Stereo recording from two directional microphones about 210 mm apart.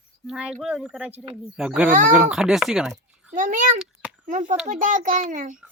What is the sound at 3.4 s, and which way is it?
A child's voice, 40° right (ahead or behind).